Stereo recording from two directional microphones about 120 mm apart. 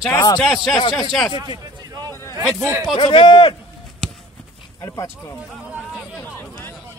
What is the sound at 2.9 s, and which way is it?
Speech, 45° left (ahead or behind).